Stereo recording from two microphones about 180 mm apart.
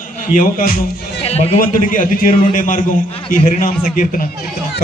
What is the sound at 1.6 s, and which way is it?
A man's voice, 50° left (ahead or behind).